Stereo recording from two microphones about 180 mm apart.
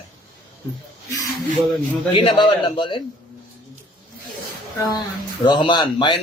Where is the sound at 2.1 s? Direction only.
25° left (ahead or behind).